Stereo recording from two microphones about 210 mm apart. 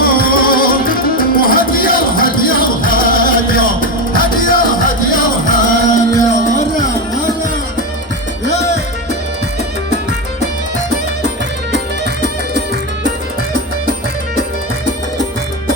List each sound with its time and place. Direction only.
0.0 s music: 45° left (ahead or behind)
8.4 s music: 35° left (ahead or behind)